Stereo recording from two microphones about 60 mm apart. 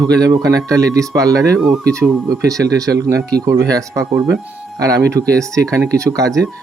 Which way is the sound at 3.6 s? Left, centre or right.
Right.